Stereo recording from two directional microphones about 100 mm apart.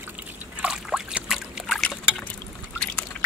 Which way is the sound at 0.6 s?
10° right (ahead or behind).